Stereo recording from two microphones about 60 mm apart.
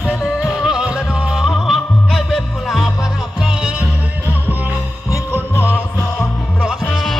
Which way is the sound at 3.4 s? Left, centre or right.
Centre.